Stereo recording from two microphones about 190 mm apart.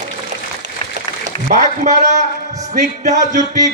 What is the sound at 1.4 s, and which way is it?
A man's voice, 45° right (ahead or behind).